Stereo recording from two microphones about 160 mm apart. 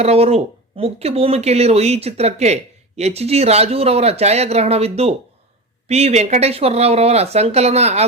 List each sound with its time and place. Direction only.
0.0 s speech: 40° right (ahead or behind)